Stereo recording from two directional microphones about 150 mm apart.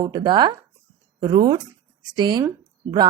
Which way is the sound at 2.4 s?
25° right (ahead or behind).